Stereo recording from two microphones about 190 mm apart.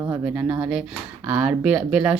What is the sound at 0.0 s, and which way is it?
Speech, 10° right (ahead or behind).